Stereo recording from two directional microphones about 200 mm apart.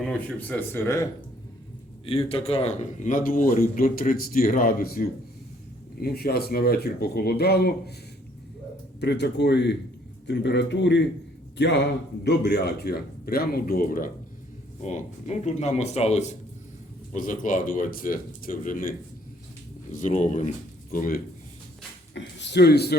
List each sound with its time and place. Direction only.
0.0 s speech: 5° left (ahead or behind)
2.0 s a man's voice: 30° left (ahead or behind); by 7.9 s 50° left (ahead or behind)
9.0 s a man's voice: 55° left (ahead or behind)
22.1 s speech: 60° left (ahead or behind)